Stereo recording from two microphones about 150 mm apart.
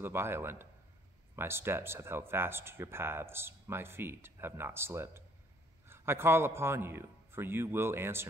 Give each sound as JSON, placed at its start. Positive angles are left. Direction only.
{"t": 0.0, "sound": "speech", "side_deg": -15}